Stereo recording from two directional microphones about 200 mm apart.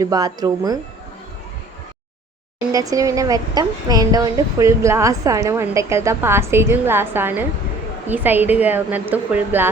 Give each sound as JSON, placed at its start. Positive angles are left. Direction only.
{"t": 0.0, "sound": "speech", "side_deg": -20}
{"t": 2.7, "sound": "a woman's voice", "side_deg": -15}